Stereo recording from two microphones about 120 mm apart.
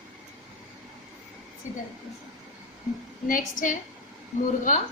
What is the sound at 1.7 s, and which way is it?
Speech, 90° left.